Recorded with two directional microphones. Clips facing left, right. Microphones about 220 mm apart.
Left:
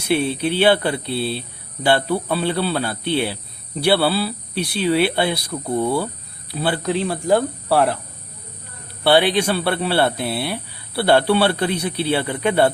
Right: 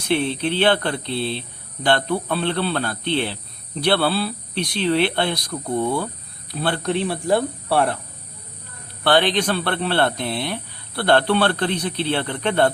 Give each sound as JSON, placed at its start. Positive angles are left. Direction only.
{"t": 0.0, "sound": "speech", "side_deg": 10}
{"t": 9.0, "sound": "speech", "side_deg": 10}